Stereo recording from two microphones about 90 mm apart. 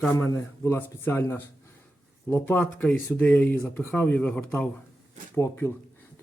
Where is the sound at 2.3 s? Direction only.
20° left (ahead or behind).